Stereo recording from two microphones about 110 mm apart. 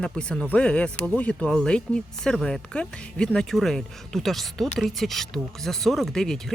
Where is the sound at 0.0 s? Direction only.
10° left (ahead or behind).